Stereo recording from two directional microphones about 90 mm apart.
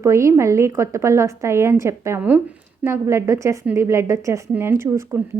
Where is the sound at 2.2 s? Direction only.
20° right (ahead or behind).